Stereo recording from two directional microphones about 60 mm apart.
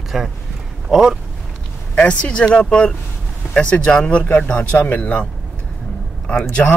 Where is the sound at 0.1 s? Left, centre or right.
Centre.